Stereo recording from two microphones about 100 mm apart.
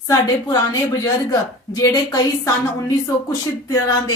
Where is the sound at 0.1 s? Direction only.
40° left (ahead or behind).